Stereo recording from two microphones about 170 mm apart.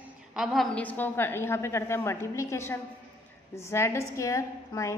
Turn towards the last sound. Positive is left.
turn(degrees=20)  # may be behind; listen again after turning